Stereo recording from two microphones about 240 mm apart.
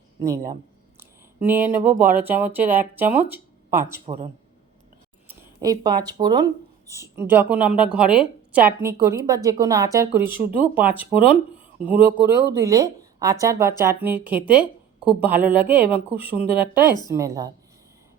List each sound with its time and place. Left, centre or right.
0.3 s speech: right
0.9 s speech: centre
4.0 s a man's voice: right
5.3 s a woman's voice: centre